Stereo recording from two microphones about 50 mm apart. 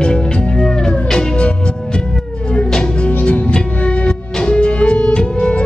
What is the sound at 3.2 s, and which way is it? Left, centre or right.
Music, left.